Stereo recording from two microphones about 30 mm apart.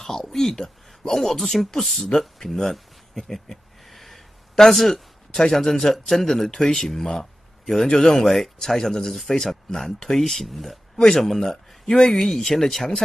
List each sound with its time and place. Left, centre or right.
0.0 s speech: centre
1.8 s a man's voice: centre
2.0 s speech: centre
3.9 s a sound: centre
5.4 s speech: left
6.0 s a man's voice: centre